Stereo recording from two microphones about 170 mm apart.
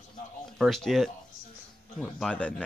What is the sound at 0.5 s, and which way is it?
Speech, centre (ahead or behind).